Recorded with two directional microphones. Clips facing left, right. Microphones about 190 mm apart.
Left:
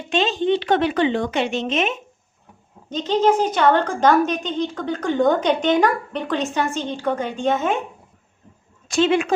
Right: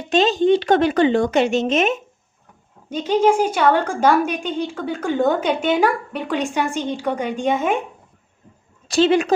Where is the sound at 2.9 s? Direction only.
10° right (ahead or behind).